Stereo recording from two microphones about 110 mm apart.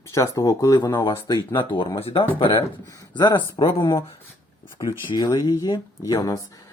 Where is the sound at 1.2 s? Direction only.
25° left (ahead or behind).